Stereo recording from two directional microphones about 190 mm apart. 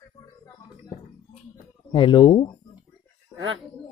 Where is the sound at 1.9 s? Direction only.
25° left (ahead or behind).